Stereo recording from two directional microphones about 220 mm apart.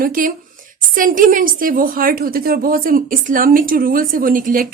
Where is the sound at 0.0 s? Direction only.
40° right (ahead or behind).